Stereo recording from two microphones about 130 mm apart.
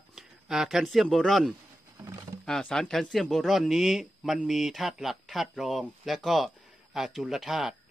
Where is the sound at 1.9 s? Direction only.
20° right (ahead or behind).